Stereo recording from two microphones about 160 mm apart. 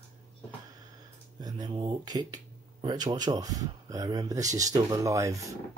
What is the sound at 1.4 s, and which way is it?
Speech, 30° right (ahead or behind).